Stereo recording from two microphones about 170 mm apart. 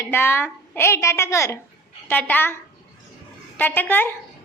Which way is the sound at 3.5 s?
10° left (ahead or behind).